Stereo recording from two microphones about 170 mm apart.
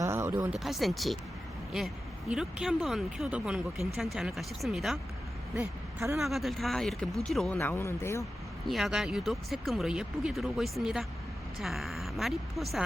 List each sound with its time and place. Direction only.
0.0 s a sound: 15° right (ahead or behind)
0.5 s speech: centre (ahead or behind)
2.3 s speech: 5° right (ahead or behind)
5.5 s a woman's voice: 15° right (ahead or behind)
6.1 s speech: centre (ahead or behind)
7.6 s speech: 15° left (ahead or behind)
8.6 s speech: centre (ahead or behind)